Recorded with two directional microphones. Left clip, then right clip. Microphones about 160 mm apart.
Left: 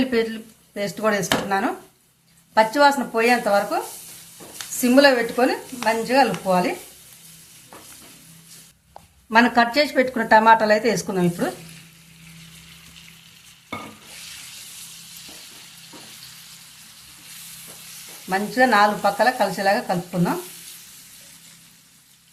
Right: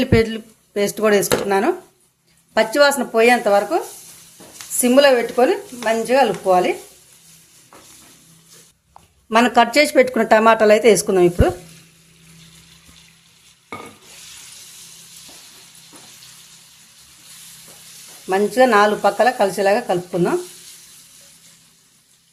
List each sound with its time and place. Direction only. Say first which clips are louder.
0.0 s a woman's voice: right 5 dB; 60° right (ahead or behind)
4.8 s speech: right 3 dB; 40° right (ahead or behind)
9.3 s a woman's voice: right 3 dB; 45° right (ahead or behind)
18.3 s a woman's voice: right 4 dB; 45° right (ahead or behind)